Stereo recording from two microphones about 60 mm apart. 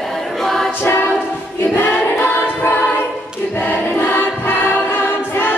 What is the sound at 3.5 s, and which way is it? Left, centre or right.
Choir, left.